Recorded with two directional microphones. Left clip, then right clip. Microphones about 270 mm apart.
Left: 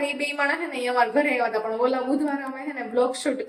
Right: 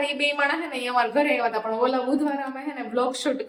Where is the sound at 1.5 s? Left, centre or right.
Centre.